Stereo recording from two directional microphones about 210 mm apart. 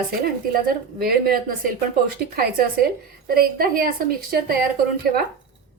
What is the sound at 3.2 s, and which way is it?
A woman's voice, 45° right (ahead or behind).